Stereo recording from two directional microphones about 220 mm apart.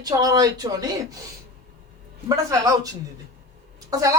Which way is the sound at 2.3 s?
15° right (ahead or behind).